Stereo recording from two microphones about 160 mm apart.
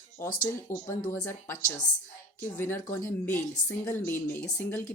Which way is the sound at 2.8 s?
55° left (ahead or behind).